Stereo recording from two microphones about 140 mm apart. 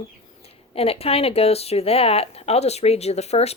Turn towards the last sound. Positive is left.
turn(degrees=50)  # may be behind; listen again after turning